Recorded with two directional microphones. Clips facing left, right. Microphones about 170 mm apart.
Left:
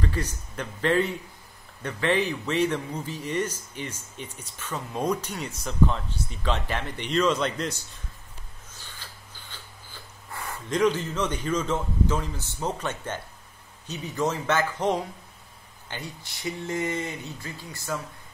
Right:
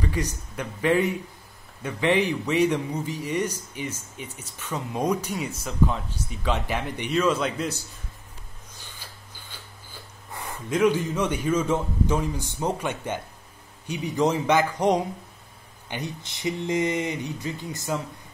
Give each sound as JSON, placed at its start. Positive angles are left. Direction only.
{"t": 0.0, "sound": "speech", "side_deg": -15}
{"t": 8.7, "sound": "a sound", "side_deg": -10}
{"t": 10.7, "sound": "speech", "side_deg": -10}